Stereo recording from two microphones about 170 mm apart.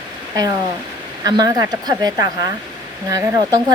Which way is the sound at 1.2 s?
25° right (ahead or behind).